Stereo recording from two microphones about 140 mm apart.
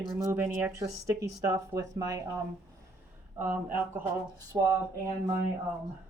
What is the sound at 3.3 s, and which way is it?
Speech, 15° right (ahead or behind).